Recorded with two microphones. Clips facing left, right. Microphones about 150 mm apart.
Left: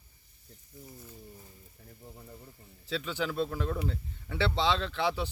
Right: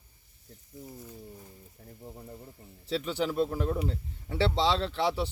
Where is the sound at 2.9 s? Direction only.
35° right (ahead or behind).